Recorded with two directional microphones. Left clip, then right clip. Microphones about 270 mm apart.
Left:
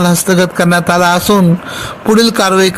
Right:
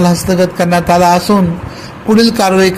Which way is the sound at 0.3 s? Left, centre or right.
Left.